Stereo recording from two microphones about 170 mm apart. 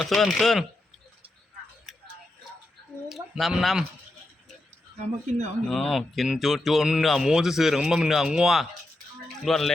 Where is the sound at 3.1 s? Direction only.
Centre (ahead or behind).